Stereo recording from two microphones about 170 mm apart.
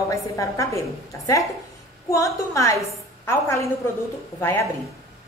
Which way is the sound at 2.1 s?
20° left (ahead or behind).